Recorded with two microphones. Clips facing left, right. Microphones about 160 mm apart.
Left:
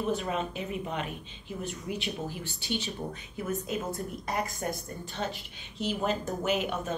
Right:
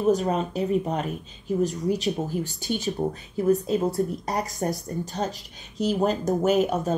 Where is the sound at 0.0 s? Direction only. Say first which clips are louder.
Right 8 dB; 40° right (ahead or behind).